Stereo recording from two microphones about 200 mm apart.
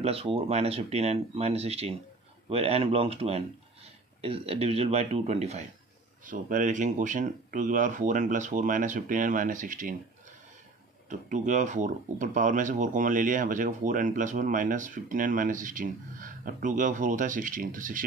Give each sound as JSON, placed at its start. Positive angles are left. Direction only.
{"t": 0.0, "sound": "speech", "side_deg": -30}
{"t": 11.1, "sound": "speech", "side_deg": -40}